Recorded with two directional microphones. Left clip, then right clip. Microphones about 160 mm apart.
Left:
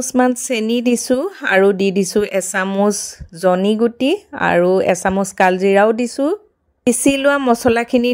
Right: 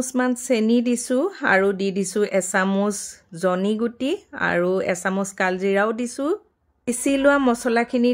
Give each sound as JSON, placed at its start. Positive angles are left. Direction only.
{"t": 0.0, "sound": "speech", "side_deg": 35}